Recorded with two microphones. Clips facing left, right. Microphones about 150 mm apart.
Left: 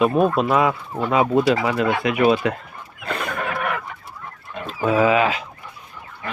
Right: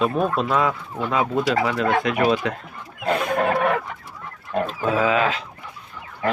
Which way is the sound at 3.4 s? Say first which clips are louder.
Right 6 dB; 40° right (ahead or behind).